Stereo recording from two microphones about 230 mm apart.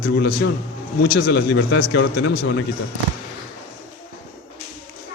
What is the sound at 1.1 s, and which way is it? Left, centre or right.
Speech, left.